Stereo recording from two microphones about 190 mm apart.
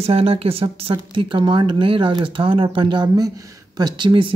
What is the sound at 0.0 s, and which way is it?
Speech, 30° right (ahead or behind).